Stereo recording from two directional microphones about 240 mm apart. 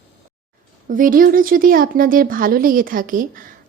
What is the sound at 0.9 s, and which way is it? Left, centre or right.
A woman's voice, right.